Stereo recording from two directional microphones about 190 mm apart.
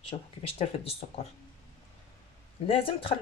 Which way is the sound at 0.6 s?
30° left (ahead or behind).